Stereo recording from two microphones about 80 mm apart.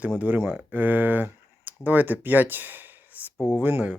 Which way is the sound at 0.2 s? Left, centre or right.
Centre.